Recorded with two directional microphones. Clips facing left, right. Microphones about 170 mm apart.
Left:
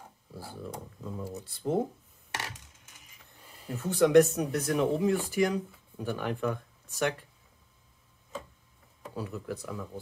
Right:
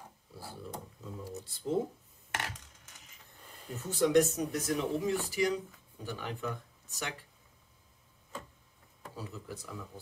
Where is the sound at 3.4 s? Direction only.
5° left (ahead or behind).